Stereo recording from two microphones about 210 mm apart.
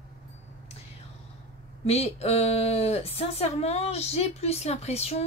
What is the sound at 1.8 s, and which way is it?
Speech, 30° left (ahead or behind).